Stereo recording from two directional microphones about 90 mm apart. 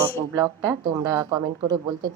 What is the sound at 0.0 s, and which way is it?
Speech, 30° right (ahead or behind).